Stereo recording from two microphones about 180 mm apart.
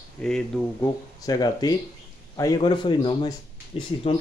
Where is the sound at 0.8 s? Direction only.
20° left (ahead or behind).